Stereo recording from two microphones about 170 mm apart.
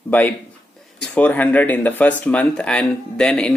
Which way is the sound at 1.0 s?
10° left (ahead or behind).